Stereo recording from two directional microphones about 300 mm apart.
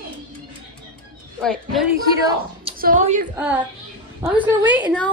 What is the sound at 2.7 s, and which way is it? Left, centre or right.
Speech, right.